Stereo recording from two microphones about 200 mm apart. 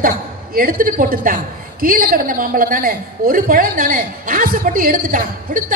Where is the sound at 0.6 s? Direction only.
45° right (ahead or behind).